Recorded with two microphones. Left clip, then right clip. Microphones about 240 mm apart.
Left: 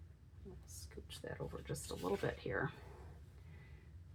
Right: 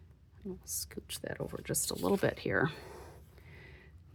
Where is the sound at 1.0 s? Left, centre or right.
Right.